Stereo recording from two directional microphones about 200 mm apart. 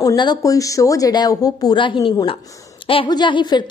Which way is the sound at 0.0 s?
20° left (ahead or behind).